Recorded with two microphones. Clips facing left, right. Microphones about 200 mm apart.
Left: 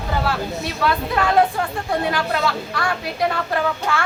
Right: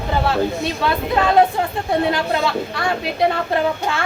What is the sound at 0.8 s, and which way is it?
A woman's voice, 25° right (ahead or behind).